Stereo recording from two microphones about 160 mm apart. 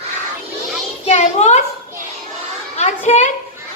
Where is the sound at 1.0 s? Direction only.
45° left (ahead or behind).